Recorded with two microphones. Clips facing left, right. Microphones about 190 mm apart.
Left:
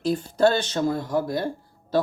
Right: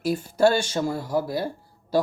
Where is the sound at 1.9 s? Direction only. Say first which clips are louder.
Even; 10° right (ahead or behind).